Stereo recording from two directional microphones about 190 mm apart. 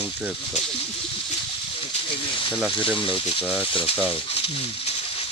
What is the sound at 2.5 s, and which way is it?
Speech, 5° right (ahead or behind).